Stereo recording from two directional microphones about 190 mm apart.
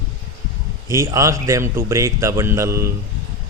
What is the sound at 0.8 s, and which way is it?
Speech, 15° right (ahead or behind).